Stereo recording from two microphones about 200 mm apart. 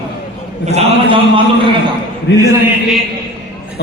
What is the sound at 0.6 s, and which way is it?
Speech, 30° right (ahead or behind).